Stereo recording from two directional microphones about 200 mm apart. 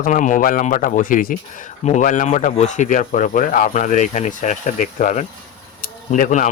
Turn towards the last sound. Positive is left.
turn(degrees=40)  # may be behind; listen again after turning